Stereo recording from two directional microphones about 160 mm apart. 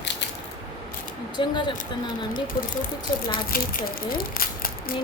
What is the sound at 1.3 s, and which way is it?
Speech, 30° left (ahead or behind).